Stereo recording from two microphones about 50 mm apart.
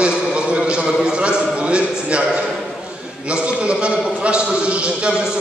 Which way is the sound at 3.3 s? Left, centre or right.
Right.